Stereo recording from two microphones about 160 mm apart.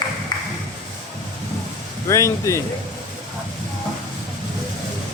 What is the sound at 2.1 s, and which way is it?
Speech, 20° left (ahead or behind).